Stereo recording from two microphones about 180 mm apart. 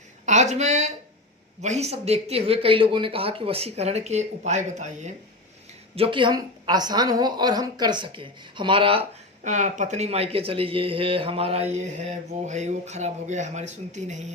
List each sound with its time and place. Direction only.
0.3 s a woman's voice: 40° right (ahead or behind)
6.0 s a woman's voice: 25° right (ahead or behind)
9.4 s speech: 45° right (ahead or behind)